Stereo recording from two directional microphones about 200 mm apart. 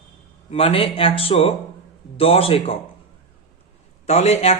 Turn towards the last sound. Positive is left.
turn(degrees=30)  # may be behind; listen again after turning